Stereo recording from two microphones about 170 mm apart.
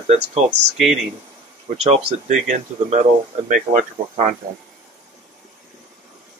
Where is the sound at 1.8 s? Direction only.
40° right (ahead or behind).